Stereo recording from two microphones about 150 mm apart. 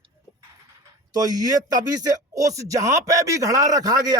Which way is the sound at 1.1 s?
25° right (ahead or behind).